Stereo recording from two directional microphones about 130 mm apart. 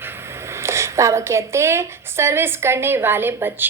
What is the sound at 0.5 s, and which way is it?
Speech, 20° right (ahead or behind).